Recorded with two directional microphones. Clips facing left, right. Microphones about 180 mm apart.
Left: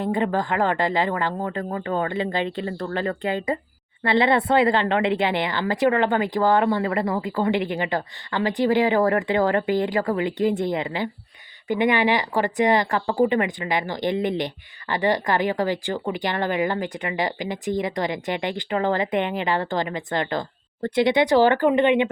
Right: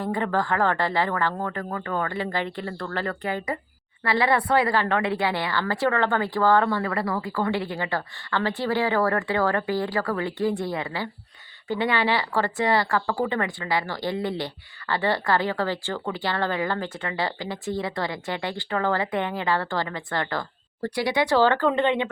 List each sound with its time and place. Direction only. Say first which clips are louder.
0.0 s speech: left 2 dB; 20° left (ahead or behind)